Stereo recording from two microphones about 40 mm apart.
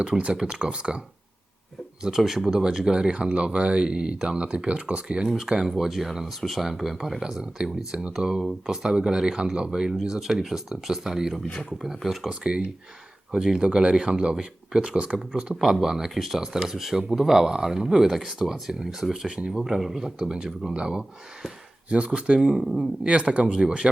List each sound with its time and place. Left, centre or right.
0.1 s speech: centre
0.4 s speech: right
2.0 s speech: centre
5.4 s speech: centre
12.3 s speech: right
13.6 s speech: right; by 20.1 s centre
20.1 s speech: centre
21.8 s speech: right
22.4 s speech: centre
23.0 s speech: right